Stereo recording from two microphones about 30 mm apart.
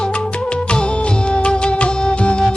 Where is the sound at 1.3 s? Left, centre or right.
Left.